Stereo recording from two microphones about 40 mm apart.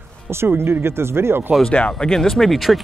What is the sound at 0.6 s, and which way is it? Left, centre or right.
Speech, right.